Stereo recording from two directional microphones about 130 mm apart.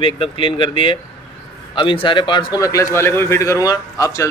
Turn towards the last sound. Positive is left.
turn(degrees=25)  # may be behind; listen again after turning